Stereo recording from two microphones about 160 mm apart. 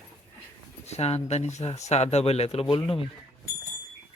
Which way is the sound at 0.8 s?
40° left (ahead or behind).